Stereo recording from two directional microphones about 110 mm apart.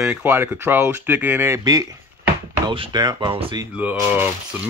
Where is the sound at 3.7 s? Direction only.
15° right (ahead or behind).